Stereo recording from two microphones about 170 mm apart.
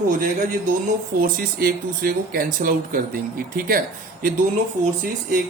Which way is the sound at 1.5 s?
60° right (ahead or behind).